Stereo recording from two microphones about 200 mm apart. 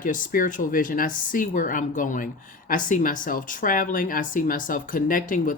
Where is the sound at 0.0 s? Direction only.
40° left (ahead or behind).